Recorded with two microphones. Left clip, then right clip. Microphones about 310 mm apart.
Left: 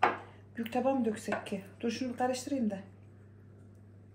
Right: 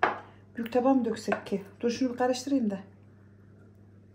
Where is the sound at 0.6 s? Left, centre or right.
Right.